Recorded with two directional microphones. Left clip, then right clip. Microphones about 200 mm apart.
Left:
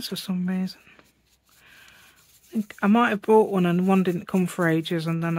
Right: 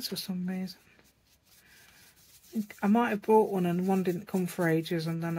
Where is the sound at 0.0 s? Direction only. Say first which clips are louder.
Left 5 dB; 35° left (ahead or behind).